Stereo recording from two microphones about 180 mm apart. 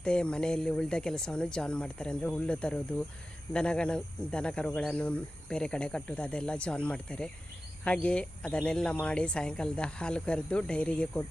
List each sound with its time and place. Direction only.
0.0 s speech: 5° left (ahead or behind)